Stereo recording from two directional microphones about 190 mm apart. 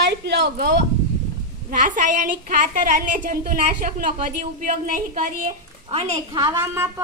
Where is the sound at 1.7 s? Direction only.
45° right (ahead or behind).